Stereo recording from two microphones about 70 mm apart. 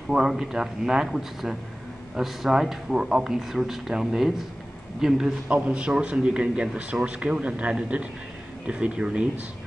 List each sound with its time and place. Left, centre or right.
0.1 s a man's voice: centre